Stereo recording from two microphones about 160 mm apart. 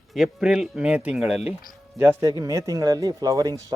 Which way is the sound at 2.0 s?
20° right (ahead or behind).